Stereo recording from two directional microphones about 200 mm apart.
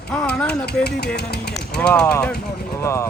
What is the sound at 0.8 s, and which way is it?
Speech, 55° left (ahead or behind).